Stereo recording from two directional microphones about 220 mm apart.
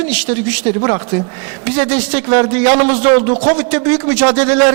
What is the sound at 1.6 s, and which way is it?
A man's voice, 15° right (ahead or behind).